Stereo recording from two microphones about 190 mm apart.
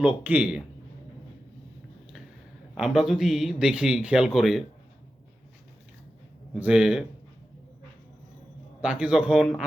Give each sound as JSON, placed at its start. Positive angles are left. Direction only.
{"t": 0.0, "sound": "speech", "side_deg": -5}
{"t": 2.7, "sound": "speech", "side_deg": -5}
{"t": 6.5, "sound": "speech", "side_deg": -5}
{"t": 8.8, "sound": "speech", "side_deg": -5}